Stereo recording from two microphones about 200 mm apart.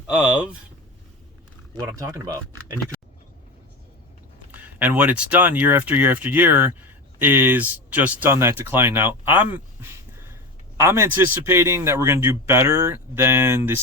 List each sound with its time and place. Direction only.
0.1 s speech: 5° right (ahead or behind)
1.8 s a man's voice: 15° right (ahead or behind)
4.5 s a man's voice: 10° right (ahead or behind)